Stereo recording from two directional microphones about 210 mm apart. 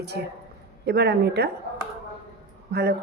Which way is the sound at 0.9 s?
50° right (ahead or behind).